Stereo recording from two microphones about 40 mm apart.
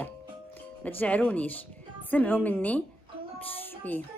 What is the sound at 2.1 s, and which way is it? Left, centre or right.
Speech, left.